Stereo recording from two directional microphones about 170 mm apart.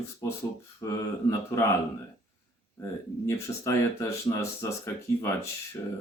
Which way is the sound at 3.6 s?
15° left (ahead or behind).